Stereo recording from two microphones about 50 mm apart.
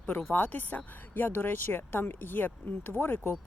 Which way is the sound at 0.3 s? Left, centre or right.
Left.